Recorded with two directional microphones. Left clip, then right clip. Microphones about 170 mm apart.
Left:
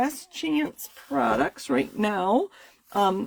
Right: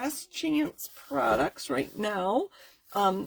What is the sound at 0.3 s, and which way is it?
Speech, 40° left (ahead or behind).